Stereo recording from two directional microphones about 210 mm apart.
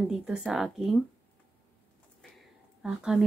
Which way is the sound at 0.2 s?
5° right (ahead or behind).